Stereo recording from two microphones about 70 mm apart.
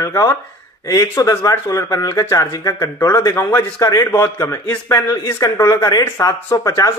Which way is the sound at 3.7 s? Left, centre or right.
Left.